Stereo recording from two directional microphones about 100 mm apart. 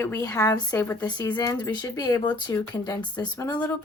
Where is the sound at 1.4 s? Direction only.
35° left (ahead or behind).